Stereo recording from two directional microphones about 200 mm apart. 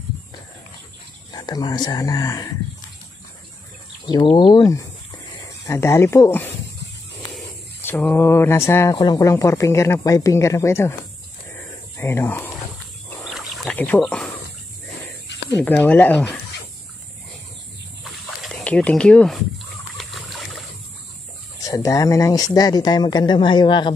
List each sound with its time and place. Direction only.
1.3 s speech: 20° left (ahead or behind)
4.1 s speech: 25° left (ahead or behind)
7.8 s speech: 10° left (ahead or behind)
12.0 s speech: 10° left (ahead or behind)
13.2 s bird: centre (ahead or behind)
15.5 s speech: 10° left (ahead or behind)
18.4 s speech: 5° left (ahead or behind)
20.0 s water: centre (ahead or behind)
21.5 s speech: 15° left (ahead or behind)